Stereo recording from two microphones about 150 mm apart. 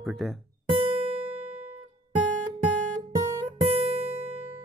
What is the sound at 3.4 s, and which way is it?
Guitar, 40° right (ahead or behind).